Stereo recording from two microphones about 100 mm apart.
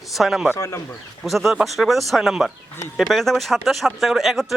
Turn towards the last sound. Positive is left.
turn(degrees=0)  # may be behind; listen again after turning